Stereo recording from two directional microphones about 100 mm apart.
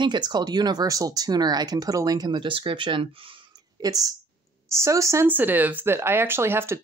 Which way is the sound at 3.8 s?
35° right (ahead or behind).